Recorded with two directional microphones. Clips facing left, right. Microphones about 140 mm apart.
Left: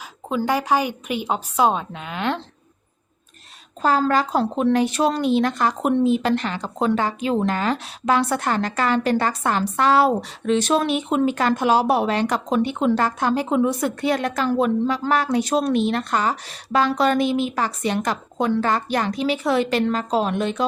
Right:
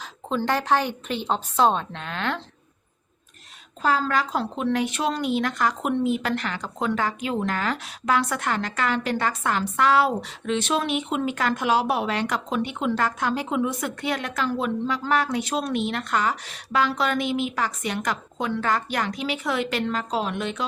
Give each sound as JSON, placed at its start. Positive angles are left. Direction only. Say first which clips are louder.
{"t": 0.3, "sound": "a woman's voice", "louder": "left 2 dB", "side_deg": 10}
{"t": 3.8, "sound": "a woman's voice", "louder": "left 4 dB", "side_deg": 35}